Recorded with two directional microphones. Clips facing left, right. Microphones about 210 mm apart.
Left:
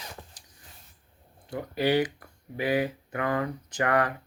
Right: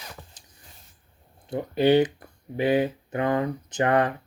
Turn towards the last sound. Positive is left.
turn(degrees=-25)  # may be behind; listen again after turning